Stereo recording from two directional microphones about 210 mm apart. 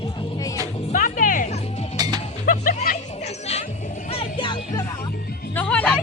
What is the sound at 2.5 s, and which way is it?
Music, 40° left (ahead or behind).